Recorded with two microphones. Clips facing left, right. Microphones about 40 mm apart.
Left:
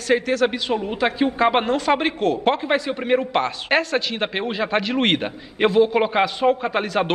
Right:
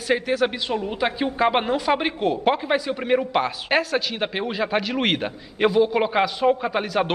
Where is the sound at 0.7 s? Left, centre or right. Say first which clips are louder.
Left 2 dB; centre.